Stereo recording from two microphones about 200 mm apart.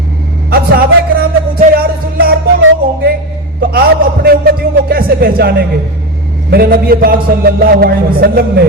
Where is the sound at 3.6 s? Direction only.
50° right (ahead or behind).